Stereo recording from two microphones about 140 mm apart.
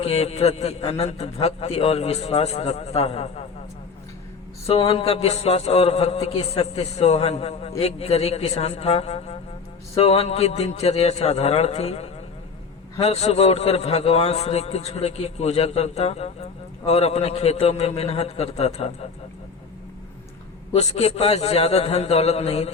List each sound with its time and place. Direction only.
0.0 s a man's voice: 45° left (ahead or behind)
4.7 s a man's voice: 45° left (ahead or behind)
20.7 s a man's voice: 50° left (ahead or behind)